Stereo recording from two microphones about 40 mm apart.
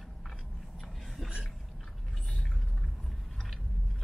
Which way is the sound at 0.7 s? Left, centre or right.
Centre.